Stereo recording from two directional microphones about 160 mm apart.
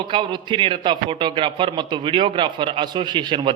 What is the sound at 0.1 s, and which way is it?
A man's voice, 30° right (ahead or behind).